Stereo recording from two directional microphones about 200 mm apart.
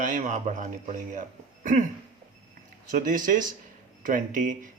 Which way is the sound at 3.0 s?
40° right (ahead or behind).